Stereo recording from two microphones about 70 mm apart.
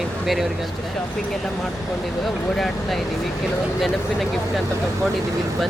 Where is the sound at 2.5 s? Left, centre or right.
Centre.